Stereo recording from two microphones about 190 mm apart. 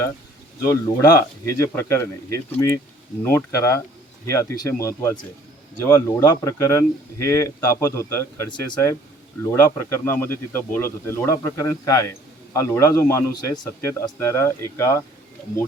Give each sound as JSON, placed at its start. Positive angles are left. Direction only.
{"t": 0.6, "sound": "speech", "side_deg": 15}